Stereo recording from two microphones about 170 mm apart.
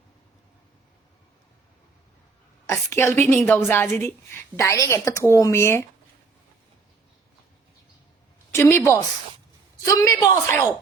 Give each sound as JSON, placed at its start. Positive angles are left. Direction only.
{"t": 2.9, "sound": "a woman's voice", "side_deg": 15}
{"t": 8.5, "sound": "a woman's voice", "side_deg": 15}